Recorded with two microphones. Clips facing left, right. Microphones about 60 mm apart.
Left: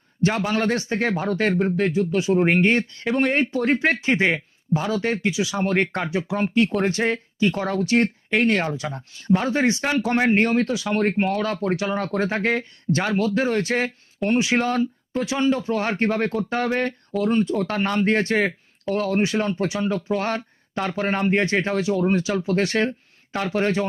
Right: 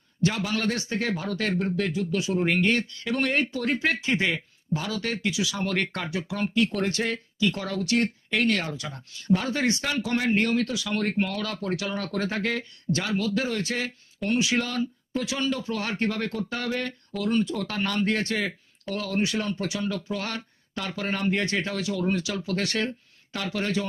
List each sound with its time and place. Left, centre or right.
0.2 s speech: left